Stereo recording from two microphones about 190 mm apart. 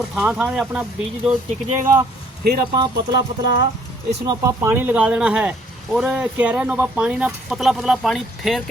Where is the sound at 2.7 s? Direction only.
20° right (ahead or behind).